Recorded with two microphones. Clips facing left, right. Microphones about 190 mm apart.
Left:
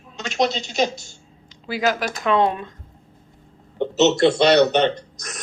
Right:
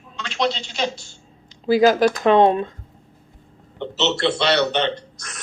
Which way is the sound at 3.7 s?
45° left (ahead or behind).